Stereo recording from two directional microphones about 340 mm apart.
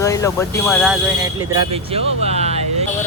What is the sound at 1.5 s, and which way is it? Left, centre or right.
Speech, centre.